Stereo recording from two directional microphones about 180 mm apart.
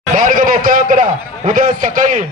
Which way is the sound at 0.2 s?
50° right (ahead or behind).